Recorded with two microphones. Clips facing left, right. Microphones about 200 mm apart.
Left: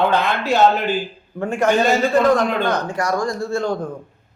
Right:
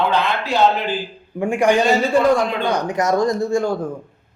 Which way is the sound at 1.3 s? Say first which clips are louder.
Right 1 dB; 15° right (ahead or behind).